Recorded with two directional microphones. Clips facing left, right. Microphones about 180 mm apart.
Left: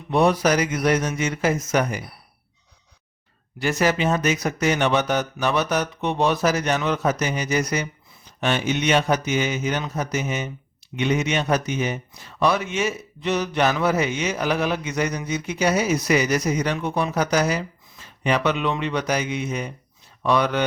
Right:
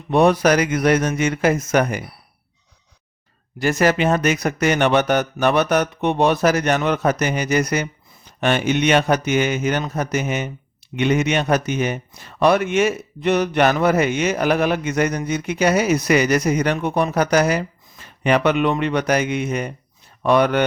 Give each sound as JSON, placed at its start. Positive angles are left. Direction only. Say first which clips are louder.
{"t": 0.1, "sound": "a man's voice", "louder": "right 4 dB", "side_deg": -60}
{"t": 3.6, "sound": "a man's voice", "louder": "right 4 dB", "side_deg": -50}